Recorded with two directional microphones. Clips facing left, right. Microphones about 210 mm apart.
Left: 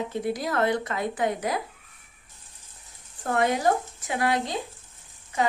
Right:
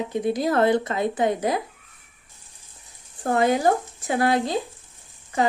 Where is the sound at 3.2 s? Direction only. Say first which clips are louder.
Right 4 dB; 30° right (ahead or behind).